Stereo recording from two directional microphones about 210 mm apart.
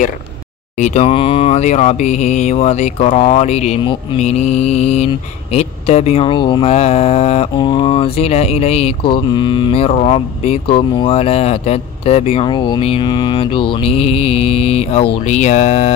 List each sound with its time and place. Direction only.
0.7 s mantra: 35° left (ahead or behind)